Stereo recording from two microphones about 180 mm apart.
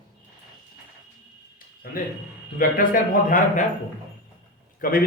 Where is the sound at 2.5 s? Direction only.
50° left (ahead or behind).